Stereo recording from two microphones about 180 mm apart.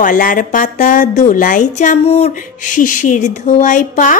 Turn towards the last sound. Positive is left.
turn(degrees=45)  # may be behind; listen again after turning